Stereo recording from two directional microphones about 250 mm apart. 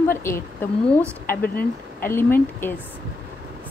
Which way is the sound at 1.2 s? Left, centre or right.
Left.